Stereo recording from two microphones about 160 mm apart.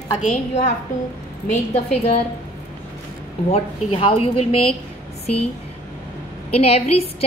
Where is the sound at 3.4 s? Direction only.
40° left (ahead or behind).